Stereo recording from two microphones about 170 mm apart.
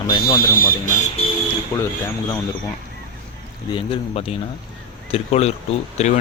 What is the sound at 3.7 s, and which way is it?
Speech, 30° left (ahead or behind).